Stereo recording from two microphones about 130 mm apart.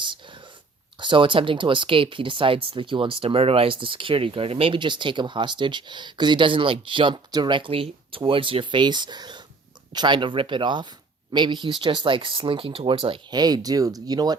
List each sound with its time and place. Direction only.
0.9 s speech: 40° right (ahead or behind)